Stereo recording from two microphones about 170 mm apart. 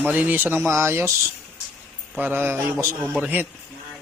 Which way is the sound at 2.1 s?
10° right (ahead or behind).